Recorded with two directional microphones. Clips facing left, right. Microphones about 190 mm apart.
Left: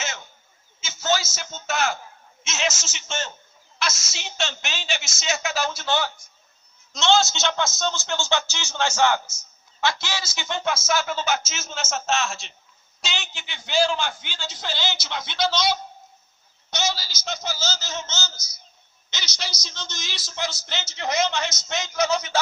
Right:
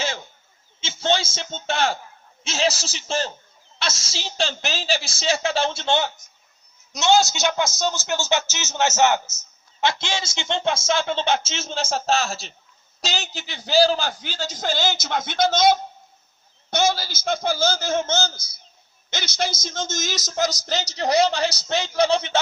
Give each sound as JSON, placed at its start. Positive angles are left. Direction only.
{"t": 0.8, "sound": "a man's voice", "side_deg": -30}